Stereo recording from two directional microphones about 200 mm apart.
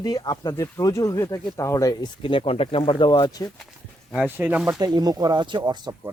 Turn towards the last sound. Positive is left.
turn(degrees=-20)  # may be behind; listen again after turning